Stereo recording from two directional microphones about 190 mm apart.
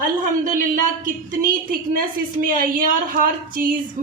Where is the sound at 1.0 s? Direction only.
45° right (ahead or behind).